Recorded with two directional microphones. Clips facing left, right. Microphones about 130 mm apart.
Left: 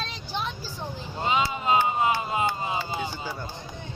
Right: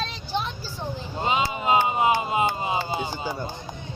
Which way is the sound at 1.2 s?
20° right (ahead or behind).